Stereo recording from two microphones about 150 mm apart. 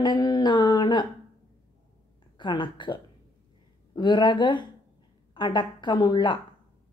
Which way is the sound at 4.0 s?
30° left (ahead or behind).